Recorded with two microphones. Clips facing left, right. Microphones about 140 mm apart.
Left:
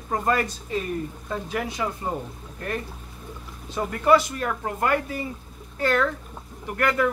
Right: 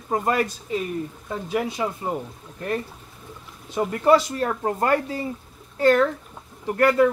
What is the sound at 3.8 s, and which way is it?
Speech, 30° right (ahead or behind).